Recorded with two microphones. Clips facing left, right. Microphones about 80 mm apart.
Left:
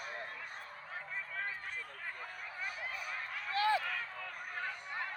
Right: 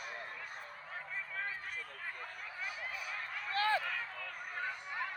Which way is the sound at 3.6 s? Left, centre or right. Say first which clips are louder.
Left 1 dB; right.